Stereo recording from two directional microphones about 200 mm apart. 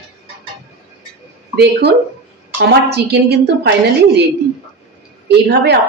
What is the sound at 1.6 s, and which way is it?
Speech, 55° right (ahead or behind).